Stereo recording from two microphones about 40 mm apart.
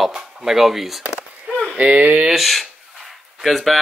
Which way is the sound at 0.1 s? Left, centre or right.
Centre.